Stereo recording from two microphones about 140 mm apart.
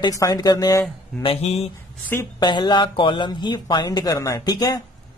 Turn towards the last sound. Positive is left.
turn(degrees=25)  # may be behind; listen again after turning